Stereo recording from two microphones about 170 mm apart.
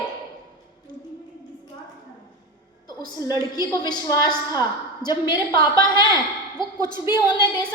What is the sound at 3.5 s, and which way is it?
A woman's voice, 25° left (ahead or behind).